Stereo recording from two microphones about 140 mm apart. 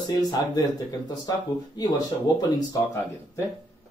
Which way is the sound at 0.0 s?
30° left (ahead or behind).